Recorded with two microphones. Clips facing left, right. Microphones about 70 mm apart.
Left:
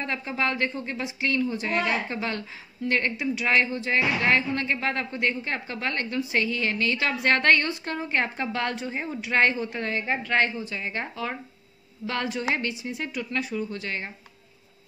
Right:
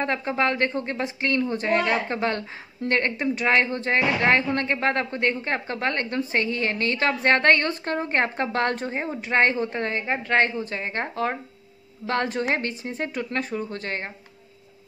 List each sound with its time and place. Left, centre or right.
0.0 s a woman's voice: right
10.4 s a woman's voice: right